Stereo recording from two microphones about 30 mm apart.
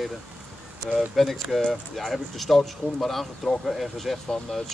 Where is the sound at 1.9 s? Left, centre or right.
Centre.